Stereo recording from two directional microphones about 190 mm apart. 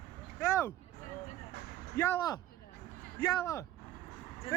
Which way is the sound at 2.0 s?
15° left (ahead or behind).